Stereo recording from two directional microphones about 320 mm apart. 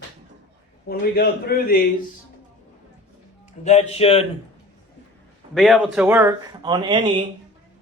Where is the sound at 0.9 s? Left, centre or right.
Left.